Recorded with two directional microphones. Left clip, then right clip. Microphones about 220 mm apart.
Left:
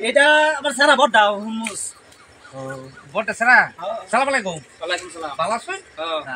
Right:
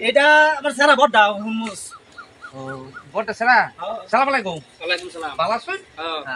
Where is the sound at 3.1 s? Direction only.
25° left (ahead or behind).